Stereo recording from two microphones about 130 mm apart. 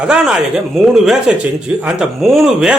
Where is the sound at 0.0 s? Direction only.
5° right (ahead or behind).